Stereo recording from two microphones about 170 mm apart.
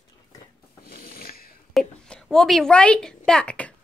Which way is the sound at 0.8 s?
65° left (ahead or behind).